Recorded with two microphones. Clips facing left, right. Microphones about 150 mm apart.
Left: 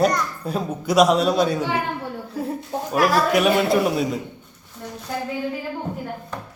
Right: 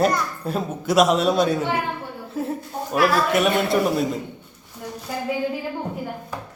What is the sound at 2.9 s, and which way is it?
Speech, 40° left (ahead or behind).